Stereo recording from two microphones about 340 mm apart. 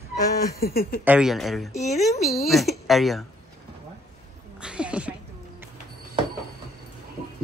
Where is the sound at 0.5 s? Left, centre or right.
Left.